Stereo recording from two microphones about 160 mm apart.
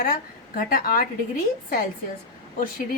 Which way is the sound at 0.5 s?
65° left (ahead or behind).